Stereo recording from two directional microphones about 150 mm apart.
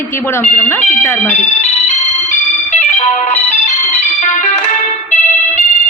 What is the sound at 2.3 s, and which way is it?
Music, 50° left (ahead or behind).